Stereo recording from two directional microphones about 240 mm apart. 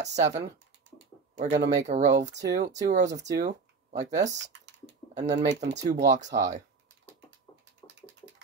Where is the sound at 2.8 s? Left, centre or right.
Right.